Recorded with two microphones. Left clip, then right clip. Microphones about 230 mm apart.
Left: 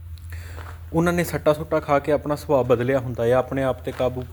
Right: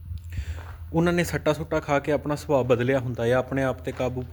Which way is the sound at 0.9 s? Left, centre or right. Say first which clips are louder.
Left 2 dB; centre.